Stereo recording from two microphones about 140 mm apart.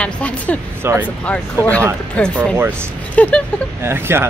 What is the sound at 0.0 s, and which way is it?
Speech, 10° left (ahead or behind).